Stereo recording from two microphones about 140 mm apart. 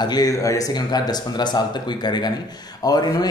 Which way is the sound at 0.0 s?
30° left (ahead or behind).